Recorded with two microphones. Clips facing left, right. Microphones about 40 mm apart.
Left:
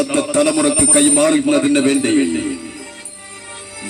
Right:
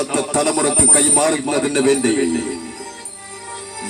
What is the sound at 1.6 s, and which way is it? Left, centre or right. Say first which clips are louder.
Speech: left 2 dB; left.